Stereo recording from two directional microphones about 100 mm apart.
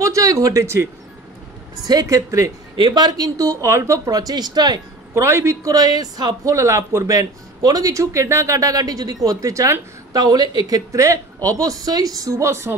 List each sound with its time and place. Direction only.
0.0 s speech: 35° right (ahead or behind)
1.9 s a man's voice: 35° right (ahead or behind)
2.7 s a man's voice: 50° right (ahead or behind)
5.1 s a man's voice: 30° right (ahead or behind)